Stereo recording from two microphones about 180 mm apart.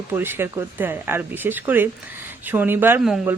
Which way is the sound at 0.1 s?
10° right (ahead or behind).